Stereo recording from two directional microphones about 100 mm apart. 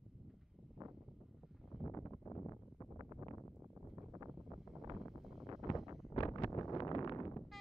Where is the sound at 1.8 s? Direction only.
30° left (ahead or behind).